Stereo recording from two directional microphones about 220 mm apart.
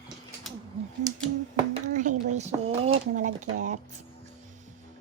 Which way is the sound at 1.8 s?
35° right (ahead or behind).